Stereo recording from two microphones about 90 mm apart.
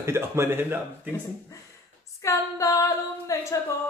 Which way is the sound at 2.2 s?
35° left (ahead or behind).